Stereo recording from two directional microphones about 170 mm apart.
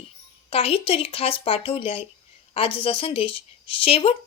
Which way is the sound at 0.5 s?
35° left (ahead or behind).